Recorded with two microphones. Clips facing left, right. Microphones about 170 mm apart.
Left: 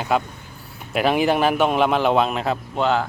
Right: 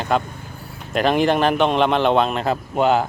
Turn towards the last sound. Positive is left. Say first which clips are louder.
# right 3 dB
turn(degrees=-15)  # may be behind; listen again after turning